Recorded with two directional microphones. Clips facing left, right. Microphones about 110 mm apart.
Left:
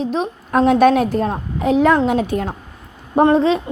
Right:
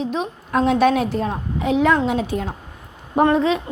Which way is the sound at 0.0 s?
40° left (ahead or behind).